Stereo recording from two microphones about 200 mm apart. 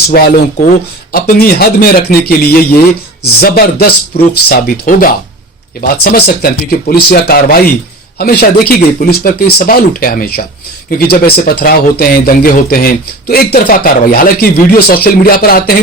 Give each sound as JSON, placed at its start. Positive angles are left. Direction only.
{"t": 0.1, "sound": "speech", "side_deg": 45}